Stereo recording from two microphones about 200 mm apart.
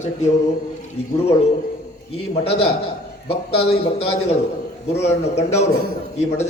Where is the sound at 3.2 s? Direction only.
30° left (ahead or behind).